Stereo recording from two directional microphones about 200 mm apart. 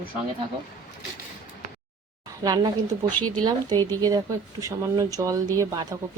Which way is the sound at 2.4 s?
20° right (ahead or behind).